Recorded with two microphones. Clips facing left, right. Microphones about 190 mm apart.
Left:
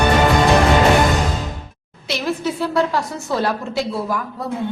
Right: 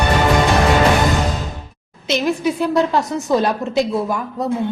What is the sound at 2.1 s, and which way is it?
A woman's voice, 20° right (ahead or behind).